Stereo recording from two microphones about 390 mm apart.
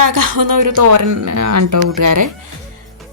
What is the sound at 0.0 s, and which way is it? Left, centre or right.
Speech, right.